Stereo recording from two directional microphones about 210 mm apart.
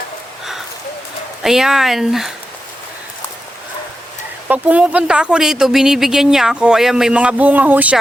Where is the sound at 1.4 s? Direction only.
Centre (ahead or behind).